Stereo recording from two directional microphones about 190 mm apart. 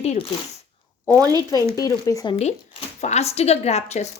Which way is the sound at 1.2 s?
20° right (ahead or behind).